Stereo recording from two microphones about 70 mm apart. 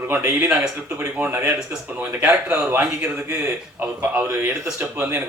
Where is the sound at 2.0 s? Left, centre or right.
Right.